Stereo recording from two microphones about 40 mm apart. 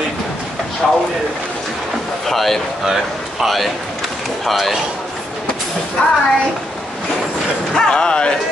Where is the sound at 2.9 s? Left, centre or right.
Centre.